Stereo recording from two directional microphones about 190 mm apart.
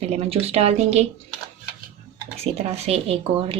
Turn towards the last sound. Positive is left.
turn(degrees=-30)  # may be behind; listen again after turning